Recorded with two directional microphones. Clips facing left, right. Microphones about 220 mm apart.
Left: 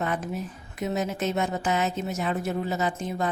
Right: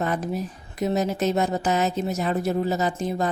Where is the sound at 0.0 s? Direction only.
40° right (ahead or behind).